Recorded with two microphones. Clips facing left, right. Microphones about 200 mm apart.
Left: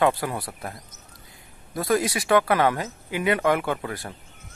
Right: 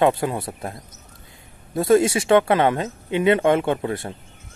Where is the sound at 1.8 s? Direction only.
25° right (ahead or behind).